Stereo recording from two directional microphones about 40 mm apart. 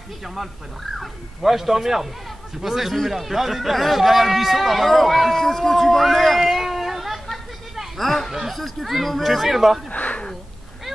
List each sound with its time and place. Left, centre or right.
0.2 s a man's voice: centre
6.4 s chatter: centre
8.3 s a man's voice: centre
9.8 s a sound: left